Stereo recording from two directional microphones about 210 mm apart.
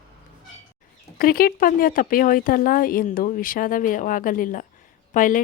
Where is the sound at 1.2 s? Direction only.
45° left (ahead or behind).